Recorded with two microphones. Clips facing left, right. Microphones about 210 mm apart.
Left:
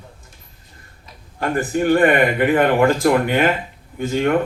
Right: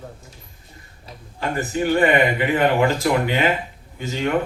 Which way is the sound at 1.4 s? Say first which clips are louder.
Left 3 dB; 50° left (ahead or behind).